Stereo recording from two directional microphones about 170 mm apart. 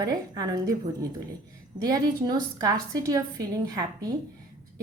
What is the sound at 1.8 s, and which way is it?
A woman's voice, 20° right (ahead or behind).